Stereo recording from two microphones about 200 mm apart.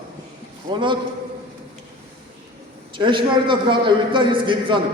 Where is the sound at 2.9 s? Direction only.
25° right (ahead or behind).